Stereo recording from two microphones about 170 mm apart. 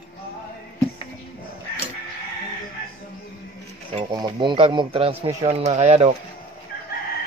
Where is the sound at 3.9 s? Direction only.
25° right (ahead or behind).